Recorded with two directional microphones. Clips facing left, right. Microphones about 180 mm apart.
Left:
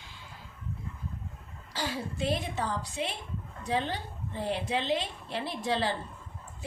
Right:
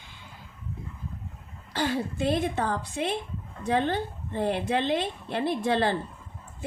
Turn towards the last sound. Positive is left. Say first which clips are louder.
# right 6 dB
turn(degrees=-55)  # may be behind; listen again after turning